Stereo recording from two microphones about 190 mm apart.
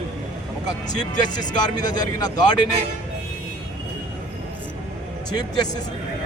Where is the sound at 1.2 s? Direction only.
20° left (ahead or behind).